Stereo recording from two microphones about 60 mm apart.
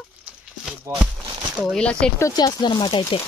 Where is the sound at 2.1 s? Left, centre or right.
Left.